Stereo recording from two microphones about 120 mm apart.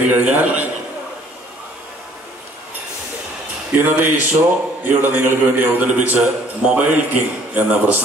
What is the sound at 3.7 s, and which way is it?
A man's voice, 15° right (ahead or behind).